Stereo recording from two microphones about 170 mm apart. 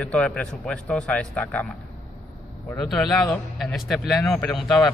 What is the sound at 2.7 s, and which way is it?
Speech, centre (ahead or behind).